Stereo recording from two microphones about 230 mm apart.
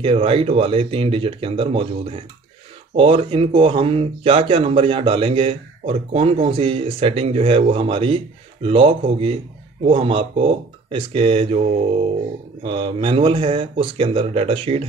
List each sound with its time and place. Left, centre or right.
0.0 s speech: right
12.6 s speech: right